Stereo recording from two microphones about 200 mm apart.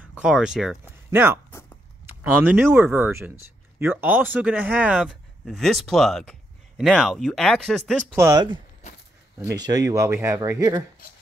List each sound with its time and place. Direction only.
0.2 s speech: 5° right (ahead or behind)
1.5 s a sound: 10° left (ahead or behind)
2.3 s speech: 5° right (ahead or behind)
8.2 s speech: 20° right (ahead or behind)